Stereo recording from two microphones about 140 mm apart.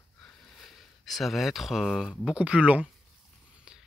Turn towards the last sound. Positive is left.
turn(degrees=-5)  # may be behind; listen again after turning